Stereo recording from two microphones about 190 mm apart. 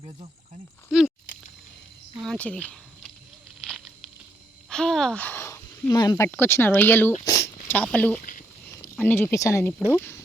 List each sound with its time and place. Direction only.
0.9 s speech: centre (ahead or behind)
2.2 s speech: 5° left (ahead or behind)
3.7 s a sound: centre (ahead or behind)
4.7 s speech: 5° left (ahead or behind)
8.2 s a sound: 45° left (ahead or behind)
9.0 s speech: 10° left (ahead or behind)